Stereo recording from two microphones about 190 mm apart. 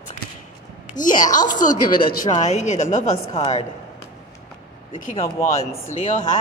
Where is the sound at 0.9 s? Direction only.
45° left (ahead or behind).